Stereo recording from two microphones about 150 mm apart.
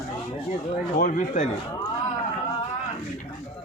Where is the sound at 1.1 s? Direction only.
55° left (ahead or behind).